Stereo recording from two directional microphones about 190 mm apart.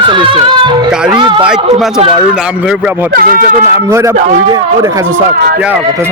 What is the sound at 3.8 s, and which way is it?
A man's voice, 15° right (ahead or behind).